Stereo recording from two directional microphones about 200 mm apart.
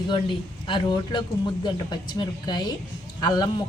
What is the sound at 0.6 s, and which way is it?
A woman's voice, 25° left (ahead or behind).